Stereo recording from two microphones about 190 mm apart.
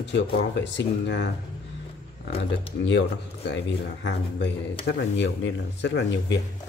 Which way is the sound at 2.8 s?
65° left (ahead or behind).